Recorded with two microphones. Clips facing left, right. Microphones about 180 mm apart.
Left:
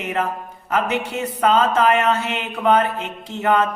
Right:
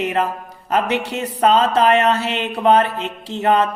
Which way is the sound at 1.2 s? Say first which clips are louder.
Right 2 dB; 35° right (ahead or behind).